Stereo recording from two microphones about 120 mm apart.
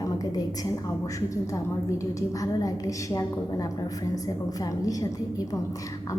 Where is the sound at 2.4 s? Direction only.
30° left (ahead or behind).